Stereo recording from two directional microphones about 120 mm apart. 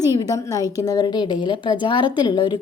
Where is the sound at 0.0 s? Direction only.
30° left (ahead or behind).